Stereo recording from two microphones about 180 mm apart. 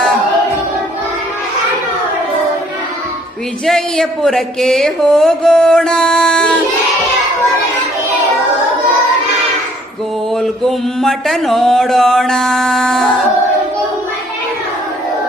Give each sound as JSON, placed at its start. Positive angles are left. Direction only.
{"t": 3.7, "sound": "mantra", "side_deg": 5}
{"t": 10.4, "sound": "mantra", "side_deg": 0}